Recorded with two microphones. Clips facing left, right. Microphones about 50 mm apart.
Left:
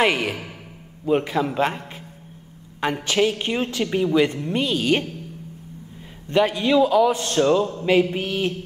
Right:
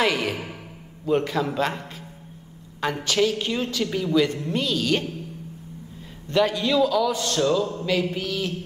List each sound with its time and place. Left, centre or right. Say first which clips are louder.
0.0 s a man's voice: left 2 dB; left
6.2 s a man's voice: left 2 dB; centre